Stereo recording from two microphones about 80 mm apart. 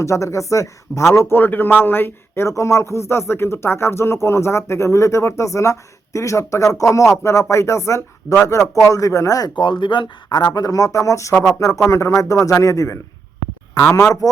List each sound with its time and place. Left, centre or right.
0.0 s speech: left
9.6 s speech: left
10.2 s speech: left